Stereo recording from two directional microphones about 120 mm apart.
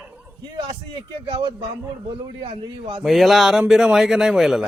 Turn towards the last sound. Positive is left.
turn(degrees=-5)  # may be behind; listen again after turning